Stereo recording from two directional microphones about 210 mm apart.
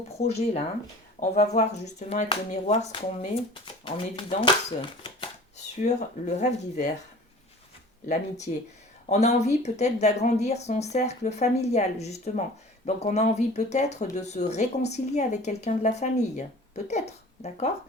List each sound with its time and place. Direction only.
0.1 s speech: 30° left (ahead or behind)
8.0 s speech: 35° left (ahead or behind)